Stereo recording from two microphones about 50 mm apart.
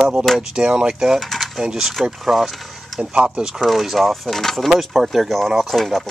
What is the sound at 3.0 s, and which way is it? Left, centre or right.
Speech, centre.